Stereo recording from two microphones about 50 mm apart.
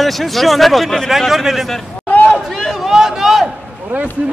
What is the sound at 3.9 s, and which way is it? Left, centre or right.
Speech, right.